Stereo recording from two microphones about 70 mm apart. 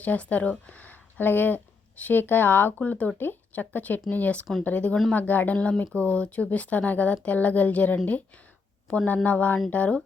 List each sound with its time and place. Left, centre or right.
0.0 s a woman's voice: left